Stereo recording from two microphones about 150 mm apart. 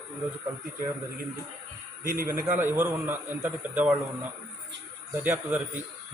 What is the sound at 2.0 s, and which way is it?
Speech, 70° right (ahead or behind).